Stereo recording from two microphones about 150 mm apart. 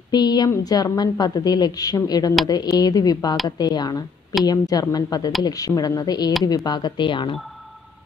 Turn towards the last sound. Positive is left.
turn(degrees=0)  # may be behind; listen again after turning